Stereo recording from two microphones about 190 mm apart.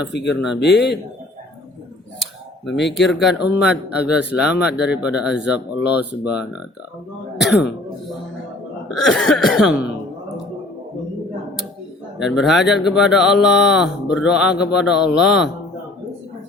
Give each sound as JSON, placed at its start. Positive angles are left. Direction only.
{"t": 0.1, "sound": "speech", "side_deg": 65}
{"t": 2.7, "sound": "speech", "side_deg": 65}
{"t": 3.1, "sound": "speech", "side_deg": 0}
{"t": 7.3, "sound": "throat clearing", "side_deg": 0}
{"t": 8.9, "sound": "speech", "side_deg": 0}
{"t": 12.2, "sound": "speech", "side_deg": 0}